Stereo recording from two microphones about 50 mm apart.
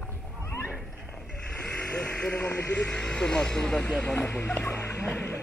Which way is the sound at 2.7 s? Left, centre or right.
Left.